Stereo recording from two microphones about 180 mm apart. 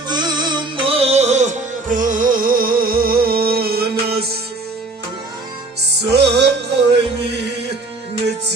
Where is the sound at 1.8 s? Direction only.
45° right (ahead or behind); by 4.4 s 60° right (ahead or behind).